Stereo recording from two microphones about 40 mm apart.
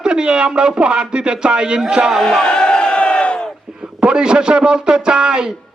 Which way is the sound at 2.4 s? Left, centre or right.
Left.